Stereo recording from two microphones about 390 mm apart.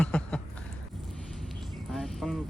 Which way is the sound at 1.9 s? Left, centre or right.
Centre.